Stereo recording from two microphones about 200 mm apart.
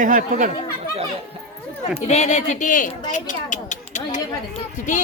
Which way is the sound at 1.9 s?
35° left (ahead or behind).